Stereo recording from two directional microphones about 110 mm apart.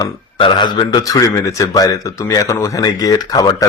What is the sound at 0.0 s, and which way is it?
A man's voice, 45° left (ahead or behind).